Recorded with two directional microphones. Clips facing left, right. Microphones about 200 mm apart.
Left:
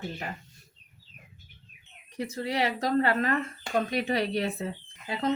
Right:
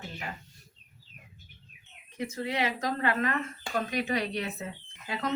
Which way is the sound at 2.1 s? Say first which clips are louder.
Left 2 dB; 35° left (ahead or behind).